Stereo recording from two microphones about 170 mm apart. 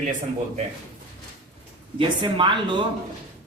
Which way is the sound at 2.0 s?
30° right (ahead or behind).